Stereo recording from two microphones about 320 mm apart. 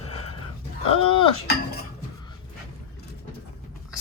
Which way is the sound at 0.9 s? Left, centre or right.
Centre.